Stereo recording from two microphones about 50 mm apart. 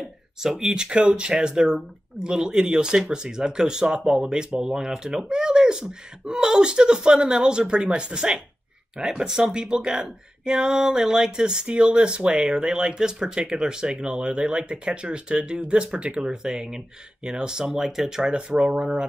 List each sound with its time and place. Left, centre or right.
0.4 s speech: centre